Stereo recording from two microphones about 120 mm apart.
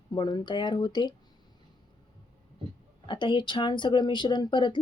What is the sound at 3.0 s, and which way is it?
Speech, 40° left (ahead or behind).